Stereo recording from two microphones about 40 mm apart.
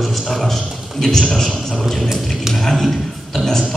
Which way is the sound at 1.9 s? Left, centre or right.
Centre.